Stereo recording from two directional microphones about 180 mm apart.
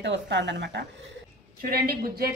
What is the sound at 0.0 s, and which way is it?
Speech, 75° right (ahead or behind).